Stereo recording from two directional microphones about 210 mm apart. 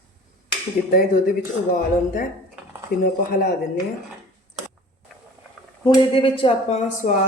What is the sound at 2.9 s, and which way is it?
Speech, 45° left (ahead or behind).